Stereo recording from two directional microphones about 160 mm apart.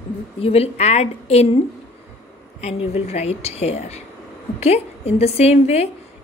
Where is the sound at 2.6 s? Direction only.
40° left (ahead or behind).